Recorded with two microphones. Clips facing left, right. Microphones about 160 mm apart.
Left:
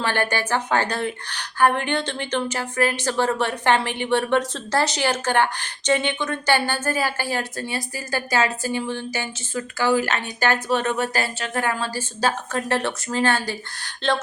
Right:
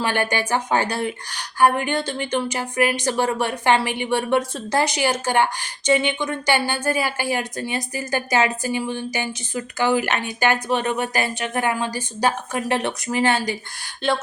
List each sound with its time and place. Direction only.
0.0 s speech: 15° right (ahead or behind)